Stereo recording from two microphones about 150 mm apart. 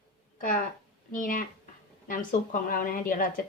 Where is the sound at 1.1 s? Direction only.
65° left (ahead or behind).